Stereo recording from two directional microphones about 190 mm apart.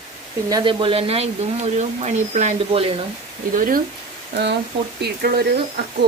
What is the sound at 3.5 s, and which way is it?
Speech, 45° right (ahead or behind).